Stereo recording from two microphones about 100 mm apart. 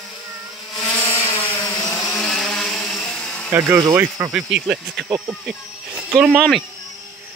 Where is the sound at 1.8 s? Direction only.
5° left (ahead or behind).